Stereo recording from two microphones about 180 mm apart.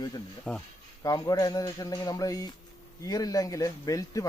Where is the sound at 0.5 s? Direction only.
5° right (ahead or behind).